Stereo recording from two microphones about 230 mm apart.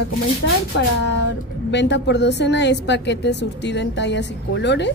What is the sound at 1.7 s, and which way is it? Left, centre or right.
A woman's voice, left.